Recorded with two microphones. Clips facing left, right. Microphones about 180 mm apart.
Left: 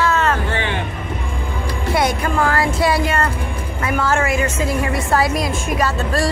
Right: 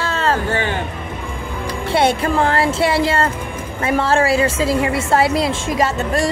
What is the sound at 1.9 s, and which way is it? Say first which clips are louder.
A woman's voice: right 3 dB; 30° right (ahead or behind).